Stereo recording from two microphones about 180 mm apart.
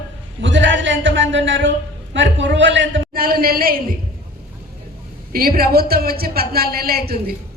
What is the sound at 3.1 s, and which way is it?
Speech, 55° right (ahead or behind).